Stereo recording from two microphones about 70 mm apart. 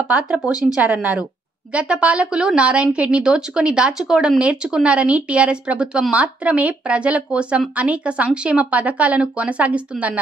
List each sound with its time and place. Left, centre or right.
0.7 s a woman's voice: right